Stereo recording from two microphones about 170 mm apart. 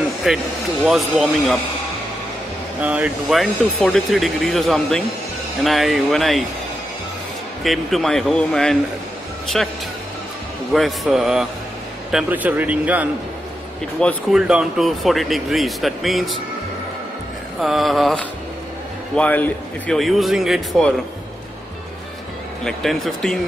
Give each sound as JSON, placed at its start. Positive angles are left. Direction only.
{"t": 0.3, "sound": "speech", "side_deg": 0}
{"t": 2.8, "sound": "speech", "side_deg": -10}
{"t": 7.6, "sound": "speech", "side_deg": 0}
{"t": 17.6, "sound": "speech", "side_deg": 0}
{"t": 22.7, "sound": "speech", "side_deg": 0}